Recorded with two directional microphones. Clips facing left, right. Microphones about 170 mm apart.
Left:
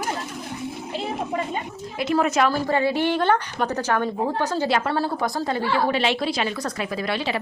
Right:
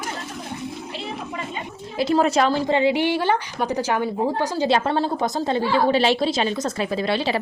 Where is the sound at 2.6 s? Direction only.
20° right (ahead or behind).